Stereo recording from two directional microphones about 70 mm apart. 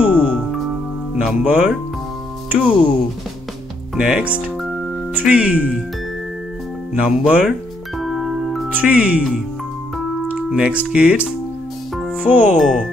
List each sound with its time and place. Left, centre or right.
0.0 s music: centre
1.4 s speech: centre
5.3 s speech: centre
6.9 s speech: centre
8.0 s music: centre
8.7 s speech: centre
10.5 s speech: centre
12.5 s speech: centre